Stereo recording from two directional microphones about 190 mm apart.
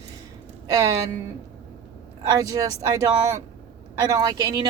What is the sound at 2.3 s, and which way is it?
A woman's voice, 20° right (ahead or behind).